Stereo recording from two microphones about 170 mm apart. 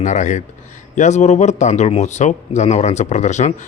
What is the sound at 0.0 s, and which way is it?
Speech, 45° left (ahead or behind).